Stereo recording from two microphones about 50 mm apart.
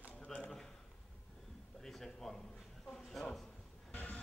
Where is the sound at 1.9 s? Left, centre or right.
Centre.